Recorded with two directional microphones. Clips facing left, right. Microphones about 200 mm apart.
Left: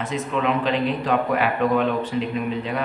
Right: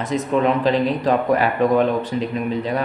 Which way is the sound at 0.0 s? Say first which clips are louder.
Right 5 dB; 40° right (ahead or behind).